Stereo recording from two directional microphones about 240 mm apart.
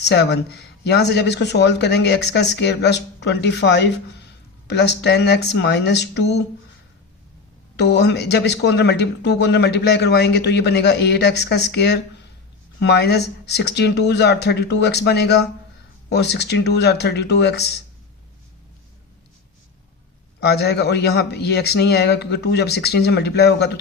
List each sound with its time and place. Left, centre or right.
0.0 s speech: left
7.8 s speech: left
20.4 s speech: left